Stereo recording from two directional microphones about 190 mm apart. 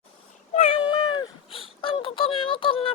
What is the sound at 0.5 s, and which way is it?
Cat, 30° left (ahead or behind).